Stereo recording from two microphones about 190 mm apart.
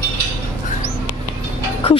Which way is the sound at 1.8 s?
30° left (ahead or behind).